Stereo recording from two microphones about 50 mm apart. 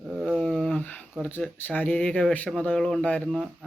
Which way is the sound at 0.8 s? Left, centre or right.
Left.